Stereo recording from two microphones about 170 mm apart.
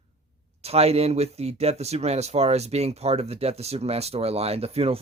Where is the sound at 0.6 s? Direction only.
35° right (ahead or behind).